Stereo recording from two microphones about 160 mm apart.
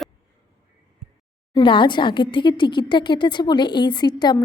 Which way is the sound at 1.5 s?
30° left (ahead or behind).